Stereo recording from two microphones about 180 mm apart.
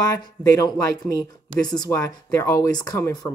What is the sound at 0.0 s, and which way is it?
Speech, 20° left (ahead or behind).